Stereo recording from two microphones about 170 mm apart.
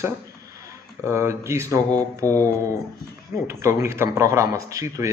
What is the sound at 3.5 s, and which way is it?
A man's voice, 15° right (ahead or behind).